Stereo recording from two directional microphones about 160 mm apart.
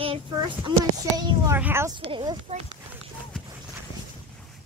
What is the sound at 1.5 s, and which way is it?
Speech, 15° right (ahead or behind).